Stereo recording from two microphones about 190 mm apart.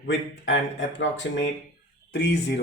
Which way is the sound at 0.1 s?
70° left (ahead or behind).